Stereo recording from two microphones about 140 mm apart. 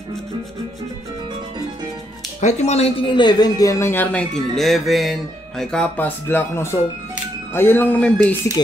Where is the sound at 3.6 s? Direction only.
20° left (ahead or behind).